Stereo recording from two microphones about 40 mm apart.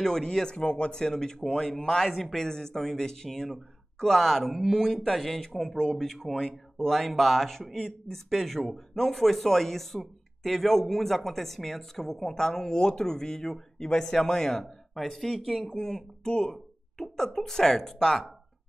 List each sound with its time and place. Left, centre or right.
0.0 s speech: centre
2.0 s speech: centre
2.3 s speech: centre